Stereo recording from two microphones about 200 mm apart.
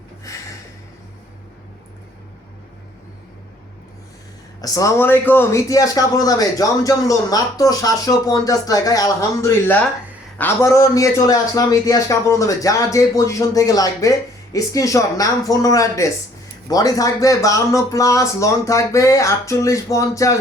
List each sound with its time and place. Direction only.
4.6 s a man's voice: 15° left (ahead or behind)